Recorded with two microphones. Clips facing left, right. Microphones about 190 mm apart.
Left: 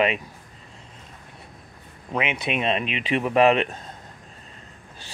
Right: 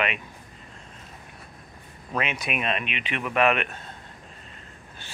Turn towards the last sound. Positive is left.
turn(degrees=30)  # may be behind; listen again after turning